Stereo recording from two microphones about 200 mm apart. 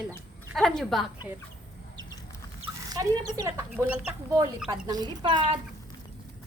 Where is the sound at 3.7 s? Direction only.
5° right (ahead or behind).